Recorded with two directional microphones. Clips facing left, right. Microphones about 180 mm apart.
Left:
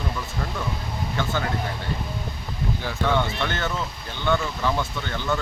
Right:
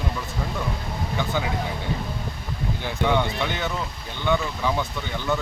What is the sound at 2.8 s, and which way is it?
Speech, 15° right (ahead or behind).